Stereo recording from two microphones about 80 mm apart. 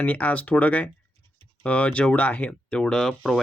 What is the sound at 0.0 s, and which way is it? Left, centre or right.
Speech, centre.